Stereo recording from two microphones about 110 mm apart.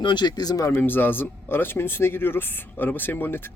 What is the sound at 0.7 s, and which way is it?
Speech, 15° left (ahead or behind).